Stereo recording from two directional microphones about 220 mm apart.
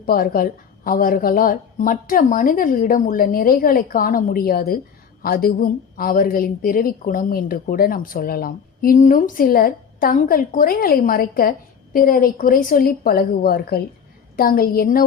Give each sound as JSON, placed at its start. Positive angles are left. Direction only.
{"t": 0.0, "sound": "a woman's voice", "side_deg": 40}